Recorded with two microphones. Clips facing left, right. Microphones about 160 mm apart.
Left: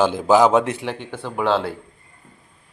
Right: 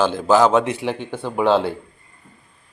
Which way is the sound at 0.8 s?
15° right (ahead or behind).